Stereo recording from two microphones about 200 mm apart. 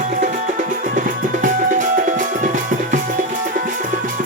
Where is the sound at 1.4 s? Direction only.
40° right (ahead or behind).